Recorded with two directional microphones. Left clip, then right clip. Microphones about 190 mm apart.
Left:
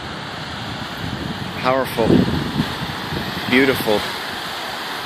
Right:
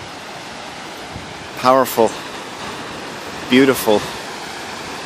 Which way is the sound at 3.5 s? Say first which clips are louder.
Right 3 dB; 20° right (ahead or behind).